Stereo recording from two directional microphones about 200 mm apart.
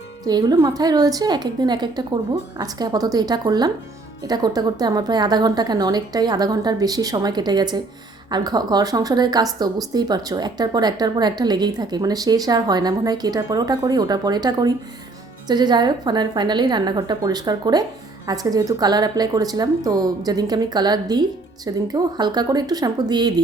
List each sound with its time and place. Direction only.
0.3 s a woman's voice: 20° right (ahead or behind)